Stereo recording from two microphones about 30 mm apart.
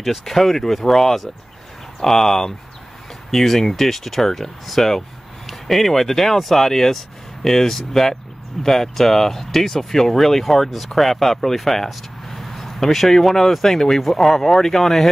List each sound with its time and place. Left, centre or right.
0.2 s speech: centre
4.8 s speech: centre
5.5 s speech: centre